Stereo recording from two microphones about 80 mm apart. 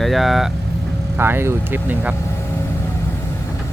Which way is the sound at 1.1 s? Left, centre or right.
Right.